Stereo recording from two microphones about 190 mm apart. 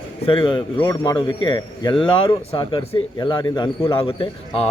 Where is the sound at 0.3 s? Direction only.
25° left (ahead or behind).